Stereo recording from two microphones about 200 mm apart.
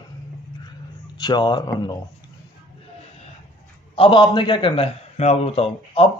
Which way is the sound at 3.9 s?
25° left (ahead or behind).